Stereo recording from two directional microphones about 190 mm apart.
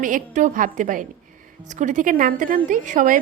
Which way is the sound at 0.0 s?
40° right (ahead or behind).